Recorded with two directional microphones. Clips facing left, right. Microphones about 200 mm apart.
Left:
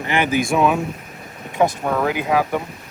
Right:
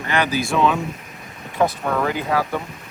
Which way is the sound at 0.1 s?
20° left (ahead or behind).